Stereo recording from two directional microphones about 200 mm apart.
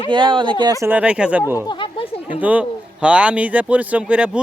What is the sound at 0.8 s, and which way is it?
Speech, 10° right (ahead or behind).